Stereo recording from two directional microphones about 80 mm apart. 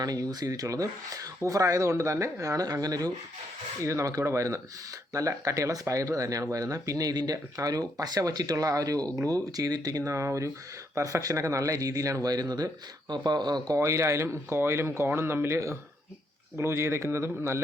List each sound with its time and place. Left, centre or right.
0.0 s speech: right
3.8 s speech: right
10.0 s speech: right
13.7 s speech: right